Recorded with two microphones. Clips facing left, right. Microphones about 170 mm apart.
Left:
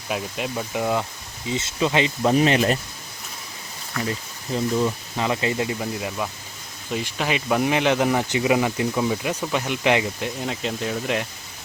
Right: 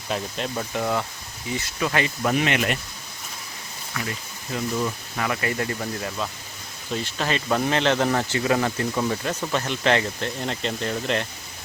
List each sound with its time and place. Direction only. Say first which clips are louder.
0.1 s speech: left 1 dB; 5° left (ahead or behind)
2.3 s speech: left 6 dB; 35° left (ahead or behind)
4.8 s speech: left 3 dB; 20° left (ahead or behind)